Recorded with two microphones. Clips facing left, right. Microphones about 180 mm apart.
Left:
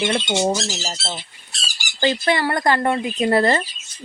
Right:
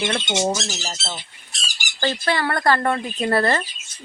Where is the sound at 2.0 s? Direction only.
15° left (ahead or behind).